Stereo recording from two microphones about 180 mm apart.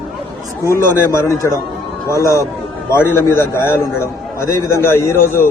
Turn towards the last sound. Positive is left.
turn(degrees=15)  # may be behind; listen again after turning